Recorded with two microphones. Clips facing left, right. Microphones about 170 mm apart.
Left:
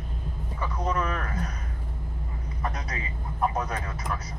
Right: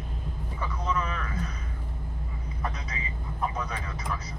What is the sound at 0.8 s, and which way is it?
Speech, 50° left (ahead or behind).